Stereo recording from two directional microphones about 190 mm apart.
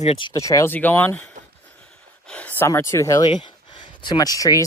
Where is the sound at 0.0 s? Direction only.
30° left (ahead or behind).